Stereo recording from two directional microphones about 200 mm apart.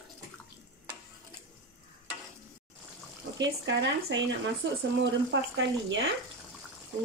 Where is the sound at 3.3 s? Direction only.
60° right (ahead or behind).